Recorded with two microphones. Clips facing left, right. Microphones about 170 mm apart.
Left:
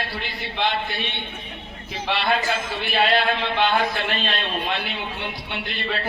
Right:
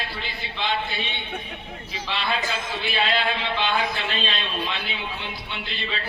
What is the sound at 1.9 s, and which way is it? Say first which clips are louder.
A man's voice: left 5 dB; 55° left (ahead or behind).